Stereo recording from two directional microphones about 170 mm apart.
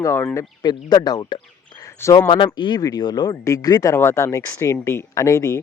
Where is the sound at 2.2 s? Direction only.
25° left (ahead or behind).